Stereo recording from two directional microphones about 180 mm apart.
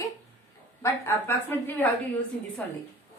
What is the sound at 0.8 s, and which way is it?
Speech, 15° left (ahead or behind).